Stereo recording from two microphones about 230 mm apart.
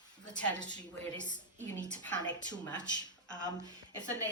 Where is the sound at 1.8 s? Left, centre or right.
Centre.